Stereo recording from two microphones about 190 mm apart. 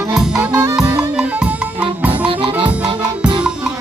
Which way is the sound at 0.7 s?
5° right (ahead or behind).